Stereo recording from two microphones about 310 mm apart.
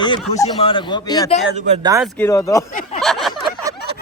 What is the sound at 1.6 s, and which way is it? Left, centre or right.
Speech, centre.